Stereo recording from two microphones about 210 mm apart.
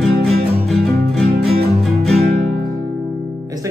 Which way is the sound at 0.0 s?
Centre (ahead or behind).